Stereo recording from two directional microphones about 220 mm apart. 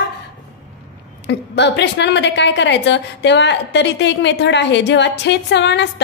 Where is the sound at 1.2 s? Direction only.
50° left (ahead or behind).